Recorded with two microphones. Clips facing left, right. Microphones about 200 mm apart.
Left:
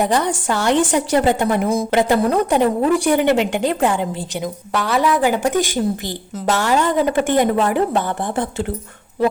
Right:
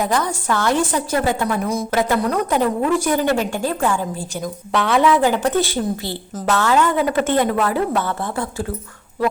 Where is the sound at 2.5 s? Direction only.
15° left (ahead or behind).